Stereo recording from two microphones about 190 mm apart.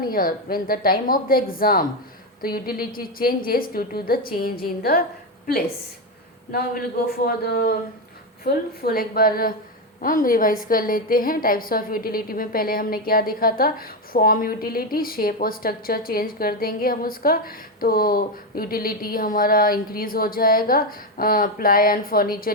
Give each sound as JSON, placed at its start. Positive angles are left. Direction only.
{"t": 0.0, "sound": "a woman's voice", "side_deg": 50}
{"t": 6.5, "sound": "a woman's voice", "side_deg": 50}
{"t": 8.8, "sound": "a woman's voice", "side_deg": 50}